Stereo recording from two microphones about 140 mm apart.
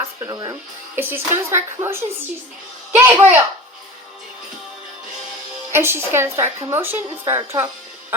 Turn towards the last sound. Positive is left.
turn(degrees=-15)  # may be behind; listen again after turning